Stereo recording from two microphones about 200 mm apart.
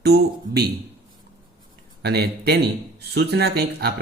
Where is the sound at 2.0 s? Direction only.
55° right (ahead or behind).